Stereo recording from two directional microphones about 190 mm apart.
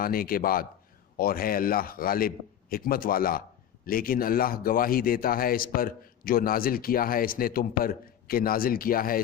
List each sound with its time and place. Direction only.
0.0 s a man's voice: 50° left (ahead or behind)